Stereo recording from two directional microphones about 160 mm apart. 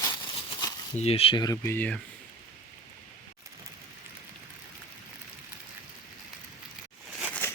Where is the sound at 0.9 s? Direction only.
40° left (ahead or behind).